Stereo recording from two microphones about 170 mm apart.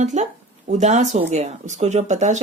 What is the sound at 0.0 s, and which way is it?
Speech, 45° right (ahead or behind).